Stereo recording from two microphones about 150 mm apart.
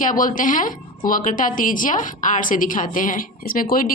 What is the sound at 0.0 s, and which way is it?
A woman's voice, 65° left (ahead or behind).